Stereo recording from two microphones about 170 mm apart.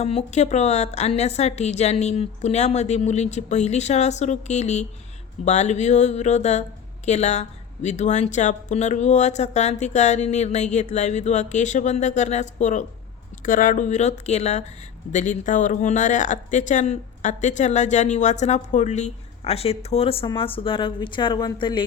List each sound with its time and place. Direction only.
0.0 s a woman's voice: 40° left (ahead or behind)